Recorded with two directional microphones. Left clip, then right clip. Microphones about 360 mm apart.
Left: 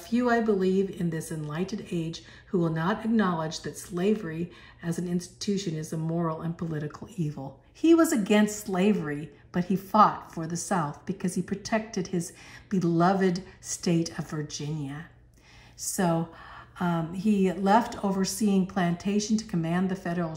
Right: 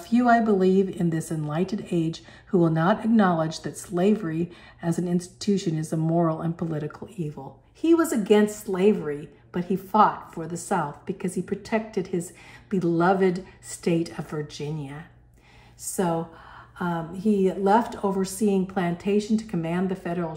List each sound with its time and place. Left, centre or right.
0.0 s a woman's voice: centre
10.8 s a woman's voice: centre
16.7 s a woman's voice: centre